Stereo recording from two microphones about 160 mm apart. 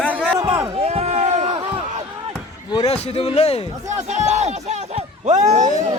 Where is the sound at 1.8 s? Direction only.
45° right (ahead or behind).